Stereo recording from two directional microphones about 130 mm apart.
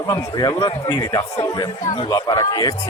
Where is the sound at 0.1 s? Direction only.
30° left (ahead or behind).